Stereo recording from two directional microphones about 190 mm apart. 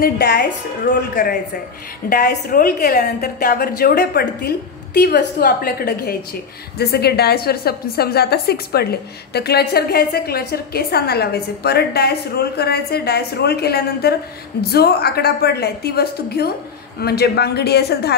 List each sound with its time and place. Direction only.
0.0 s a woman's voice: 50° left (ahead or behind)